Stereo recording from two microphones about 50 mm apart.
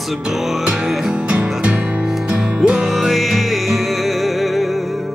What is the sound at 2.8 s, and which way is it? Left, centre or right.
Music, centre.